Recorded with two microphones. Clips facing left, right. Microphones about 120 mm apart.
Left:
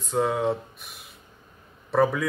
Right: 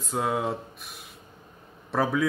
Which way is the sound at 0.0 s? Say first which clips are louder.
Left 3 dB; centre (ahead or behind).